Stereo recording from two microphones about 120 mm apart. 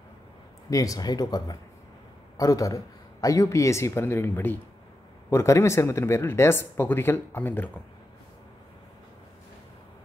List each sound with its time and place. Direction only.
0.7 s speech: 30° left (ahead or behind)